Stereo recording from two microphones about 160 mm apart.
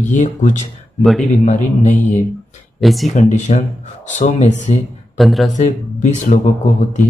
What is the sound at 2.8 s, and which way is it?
Speech, centre (ahead or behind).